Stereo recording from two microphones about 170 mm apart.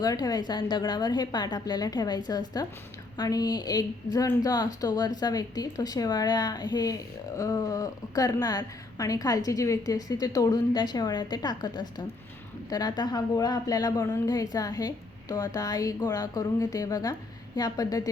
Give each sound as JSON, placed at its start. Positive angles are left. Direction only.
{"t": 0.0, "sound": "a woman's voice", "side_deg": 20}